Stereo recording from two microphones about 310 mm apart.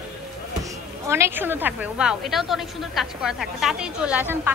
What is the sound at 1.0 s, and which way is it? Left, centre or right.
A woman's voice, centre.